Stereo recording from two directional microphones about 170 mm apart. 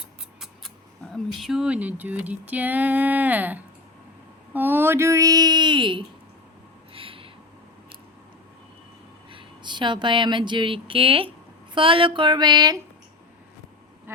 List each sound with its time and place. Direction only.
1.1 s speech: centre (ahead or behind); by 6.1 s 30° right (ahead or behind)
6.9 s a sound: 30° right (ahead or behind)
9.3 s speech: 25° right (ahead or behind)